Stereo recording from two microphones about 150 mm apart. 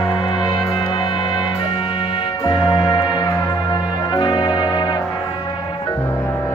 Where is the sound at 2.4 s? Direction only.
30° left (ahead or behind).